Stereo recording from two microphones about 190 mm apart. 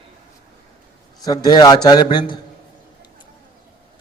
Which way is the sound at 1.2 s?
20° left (ahead or behind).